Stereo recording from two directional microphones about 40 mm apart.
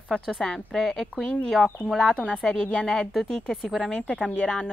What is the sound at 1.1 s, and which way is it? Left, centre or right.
Speech, left.